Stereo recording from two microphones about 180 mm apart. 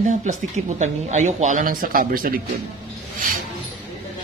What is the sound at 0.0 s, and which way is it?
Speech, 40° right (ahead or behind).